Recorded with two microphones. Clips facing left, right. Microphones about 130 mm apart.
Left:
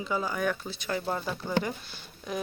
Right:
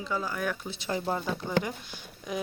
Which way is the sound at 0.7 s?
25° right (ahead or behind).